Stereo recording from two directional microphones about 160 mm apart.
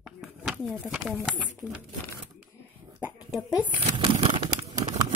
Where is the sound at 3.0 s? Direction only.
10° right (ahead or behind).